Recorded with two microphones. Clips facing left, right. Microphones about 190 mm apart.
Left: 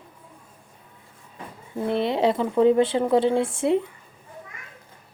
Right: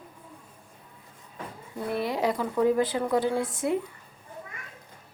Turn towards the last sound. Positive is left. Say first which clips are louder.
# left 6 dB
turn(degrees=25)  # may be behind; listen again after turning